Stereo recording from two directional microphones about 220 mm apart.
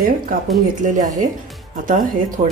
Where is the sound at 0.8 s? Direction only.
35° right (ahead or behind).